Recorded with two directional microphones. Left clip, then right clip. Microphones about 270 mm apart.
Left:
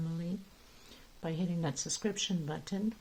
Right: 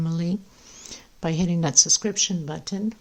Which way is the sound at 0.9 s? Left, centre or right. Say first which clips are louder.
Right 12 dB; right.